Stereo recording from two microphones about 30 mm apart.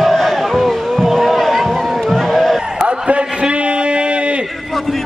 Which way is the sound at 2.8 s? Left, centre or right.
Right.